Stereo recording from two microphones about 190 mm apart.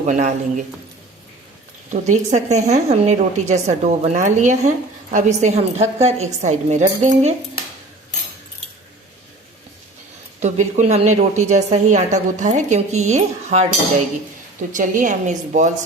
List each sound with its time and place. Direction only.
0.0 s a woman's voice: 40° right (ahead or behind)
1.9 s a woman's voice: 40° right (ahead or behind)
10.4 s a woman's voice: 40° right (ahead or behind)
14.7 s a woman's voice: 40° right (ahead or behind)